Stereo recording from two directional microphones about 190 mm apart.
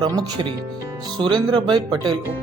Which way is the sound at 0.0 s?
20° right (ahead or behind).